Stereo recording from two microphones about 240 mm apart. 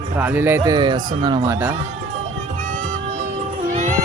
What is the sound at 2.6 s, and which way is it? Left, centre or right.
Music, right.